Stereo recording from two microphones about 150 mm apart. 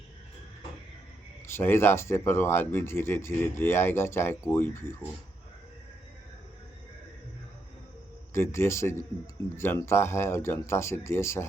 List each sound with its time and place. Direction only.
1.5 s speech: 15° left (ahead or behind)
8.3 s speech: 15° left (ahead or behind)